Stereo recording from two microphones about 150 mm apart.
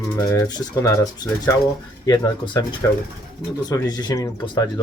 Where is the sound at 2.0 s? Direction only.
30° left (ahead or behind).